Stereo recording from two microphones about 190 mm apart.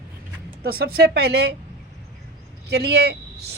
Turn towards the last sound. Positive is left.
turn(degrees=-60)  # may be behind; listen again after turning